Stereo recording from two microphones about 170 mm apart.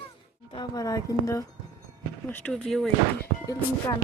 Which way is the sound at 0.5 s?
25° left (ahead or behind).